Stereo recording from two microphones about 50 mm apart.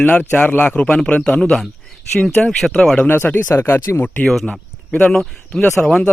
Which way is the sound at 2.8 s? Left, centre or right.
Centre.